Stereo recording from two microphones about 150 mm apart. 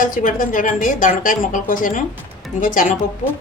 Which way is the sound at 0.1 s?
60° left (ahead or behind).